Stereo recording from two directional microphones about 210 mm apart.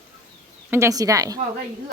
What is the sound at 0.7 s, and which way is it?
Speech, 15° right (ahead or behind).